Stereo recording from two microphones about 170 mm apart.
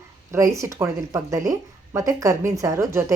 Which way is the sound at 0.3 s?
20° right (ahead or behind).